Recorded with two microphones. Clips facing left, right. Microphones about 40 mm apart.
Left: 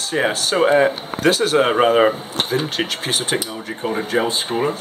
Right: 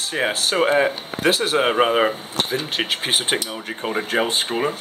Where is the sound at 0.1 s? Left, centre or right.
Centre.